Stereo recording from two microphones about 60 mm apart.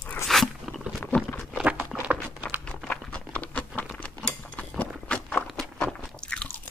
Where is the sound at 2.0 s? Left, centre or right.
Right.